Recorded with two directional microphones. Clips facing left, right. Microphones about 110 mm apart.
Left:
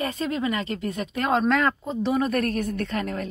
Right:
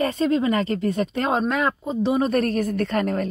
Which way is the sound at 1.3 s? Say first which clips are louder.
Left 3 dB; 15° right (ahead or behind).